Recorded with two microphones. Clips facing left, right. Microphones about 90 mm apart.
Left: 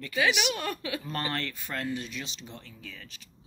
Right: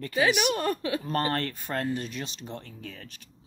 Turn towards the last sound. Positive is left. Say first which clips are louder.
# right 4 dB
turn(degrees=-50)  # may be behind; listen again after turning